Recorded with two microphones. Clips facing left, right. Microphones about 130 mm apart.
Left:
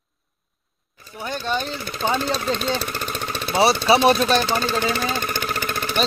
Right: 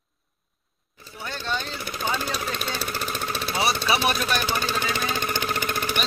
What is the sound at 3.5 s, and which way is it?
Speech, 30° left (ahead or behind).